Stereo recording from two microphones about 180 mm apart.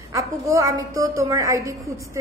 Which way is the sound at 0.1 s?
15° right (ahead or behind).